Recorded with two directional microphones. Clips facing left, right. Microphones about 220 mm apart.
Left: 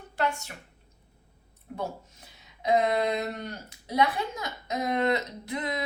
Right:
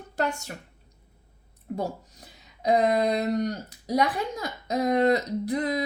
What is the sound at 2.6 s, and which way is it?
Speech, 35° right (ahead or behind).